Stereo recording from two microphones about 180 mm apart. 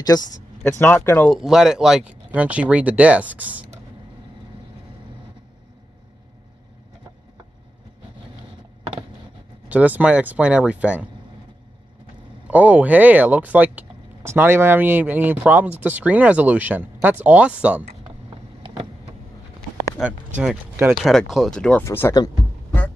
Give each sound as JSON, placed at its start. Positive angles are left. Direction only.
{"t": 0.7, "sound": "speech", "side_deg": 10}
{"t": 1.4, "sound": "speech", "side_deg": 0}
{"t": 9.7, "sound": "speech", "side_deg": -10}
{"t": 12.4, "sound": "speech", "side_deg": -10}
{"t": 20.0, "sound": "speech", "side_deg": 0}
{"t": 20.9, "sound": "speech", "side_deg": 0}